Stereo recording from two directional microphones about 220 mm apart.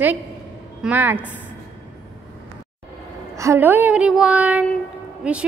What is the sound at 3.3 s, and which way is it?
A woman's voice, 15° right (ahead or behind).